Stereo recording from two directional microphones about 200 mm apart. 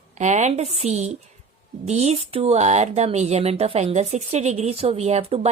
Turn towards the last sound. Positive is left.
turn(degrees=-30)  # may be behind; listen again after turning